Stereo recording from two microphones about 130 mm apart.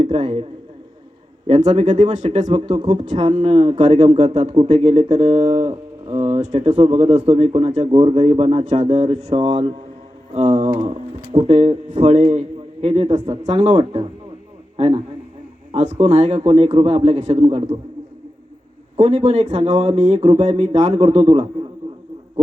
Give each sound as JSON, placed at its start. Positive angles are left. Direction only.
{"t": 0.0, "sound": "a man's voice", "side_deg": -60}
{"t": 1.5, "sound": "speech", "side_deg": -60}
{"t": 2.5, "sound": "a man's voice", "side_deg": -55}
{"t": 18.9, "sound": "speech", "side_deg": -55}